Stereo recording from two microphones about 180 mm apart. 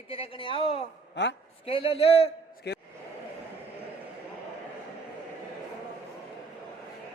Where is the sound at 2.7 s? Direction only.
70° left (ahead or behind).